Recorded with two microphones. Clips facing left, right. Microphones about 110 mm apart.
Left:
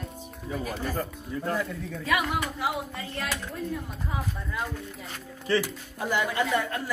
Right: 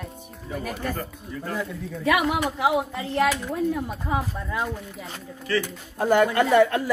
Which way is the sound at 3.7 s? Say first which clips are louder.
Right 7 dB; 90° right.